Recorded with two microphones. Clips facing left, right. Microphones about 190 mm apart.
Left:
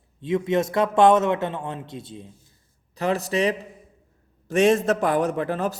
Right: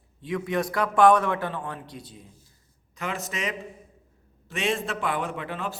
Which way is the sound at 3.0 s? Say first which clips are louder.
Left 10 dB; 35° left (ahead or behind).